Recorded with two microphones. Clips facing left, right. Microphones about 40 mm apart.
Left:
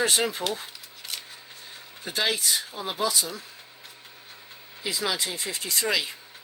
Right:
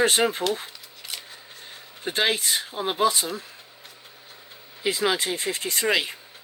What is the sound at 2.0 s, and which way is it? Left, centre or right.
Speech, right.